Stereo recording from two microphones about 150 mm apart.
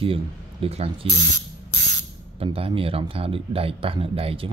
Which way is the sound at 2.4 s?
40° right (ahead or behind).